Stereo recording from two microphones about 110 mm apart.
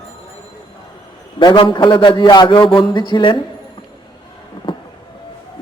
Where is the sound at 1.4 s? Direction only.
50° left (ahead or behind).